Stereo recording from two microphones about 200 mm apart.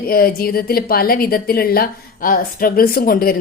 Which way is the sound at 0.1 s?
50° left (ahead or behind).